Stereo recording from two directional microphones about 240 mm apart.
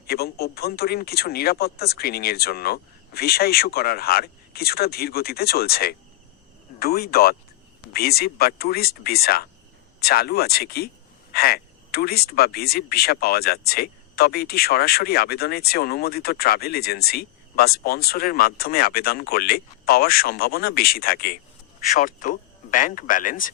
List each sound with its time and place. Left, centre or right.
0.1 s speech: left